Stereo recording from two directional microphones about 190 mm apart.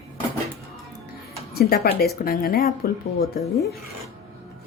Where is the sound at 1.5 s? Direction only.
55° left (ahead or behind).